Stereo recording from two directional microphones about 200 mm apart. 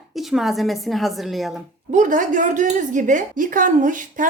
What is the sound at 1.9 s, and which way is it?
Speech, 40° right (ahead or behind).